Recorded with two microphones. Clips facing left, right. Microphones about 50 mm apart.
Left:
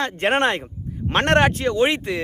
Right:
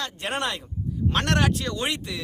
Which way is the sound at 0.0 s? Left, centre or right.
Left.